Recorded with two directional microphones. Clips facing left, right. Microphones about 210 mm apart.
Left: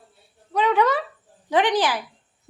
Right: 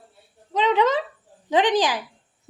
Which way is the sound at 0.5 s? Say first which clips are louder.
Even; 20° right (ahead or behind).